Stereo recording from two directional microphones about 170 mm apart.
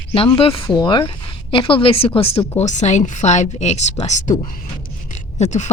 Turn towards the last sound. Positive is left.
turn(degrees=45)  # may be behind; listen again after turning